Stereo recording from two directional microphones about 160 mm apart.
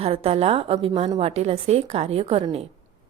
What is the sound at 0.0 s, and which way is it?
Speech, 40° right (ahead or behind).